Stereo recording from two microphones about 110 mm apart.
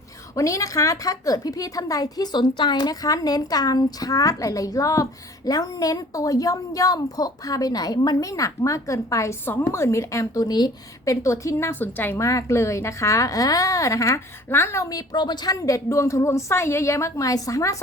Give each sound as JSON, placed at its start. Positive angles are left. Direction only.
{"t": 0.3, "sound": "a woman's voice", "side_deg": 30}
{"t": 15.5, "sound": "a woman's voice", "side_deg": 30}